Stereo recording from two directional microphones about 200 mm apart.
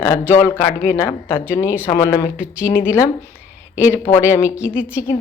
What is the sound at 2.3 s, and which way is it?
Speech, 5° right (ahead or behind).